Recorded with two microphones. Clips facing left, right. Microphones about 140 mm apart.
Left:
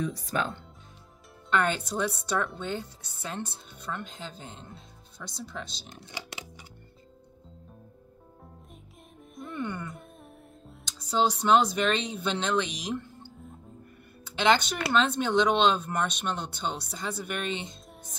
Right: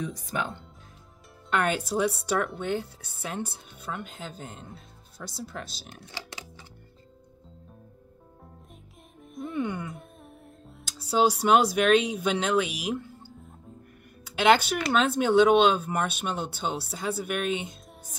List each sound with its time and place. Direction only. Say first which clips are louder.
0.2 s speech: left 1 dB; 15° right (ahead or behind)
5.9 s music: left 1 dB; 15° left (ahead or behind)
9.3 s music: right 4 dB; centre (ahead or behind)
10.9 s speech: right 3 dB; 10° right (ahead or behind)
14.3 s speech: right 3 dB; 5° right (ahead or behind)